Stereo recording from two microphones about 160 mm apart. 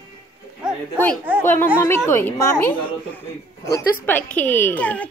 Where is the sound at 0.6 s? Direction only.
5° right (ahead or behind).